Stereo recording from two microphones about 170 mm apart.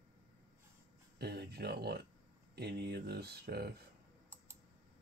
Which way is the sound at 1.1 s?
70° right (ahead or behind).